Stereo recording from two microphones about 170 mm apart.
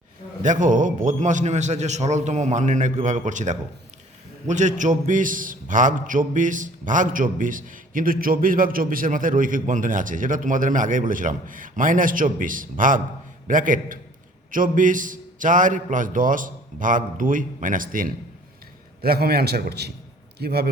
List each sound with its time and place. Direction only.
0.4 s a man's voice: 50° right (ahead or behind)
19.0 s a man's voice: 65° right (ahead or behind)